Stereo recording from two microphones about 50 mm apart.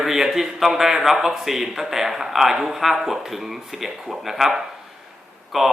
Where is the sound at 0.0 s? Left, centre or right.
Centre.